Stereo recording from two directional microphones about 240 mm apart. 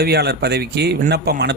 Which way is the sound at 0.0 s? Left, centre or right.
Right.